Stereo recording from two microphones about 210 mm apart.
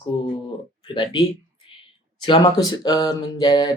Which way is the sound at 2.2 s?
20° left (ahead or behind).